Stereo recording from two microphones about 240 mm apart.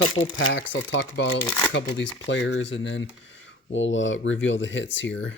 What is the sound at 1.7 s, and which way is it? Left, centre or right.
Speech, left.